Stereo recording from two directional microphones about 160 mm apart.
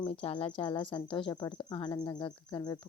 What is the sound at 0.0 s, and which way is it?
Speech, 35° left (ahead or behind).